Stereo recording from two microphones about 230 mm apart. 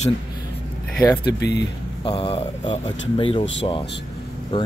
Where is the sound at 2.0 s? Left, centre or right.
Left.